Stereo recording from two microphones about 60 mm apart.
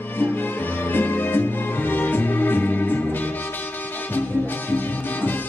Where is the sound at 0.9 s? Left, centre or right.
Left.